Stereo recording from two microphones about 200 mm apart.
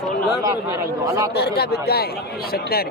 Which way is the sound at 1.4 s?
50° left (ahead or behind).